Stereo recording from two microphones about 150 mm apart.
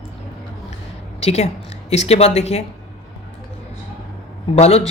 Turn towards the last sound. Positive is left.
turn(degrees=45)  # may be behind; listen again after turning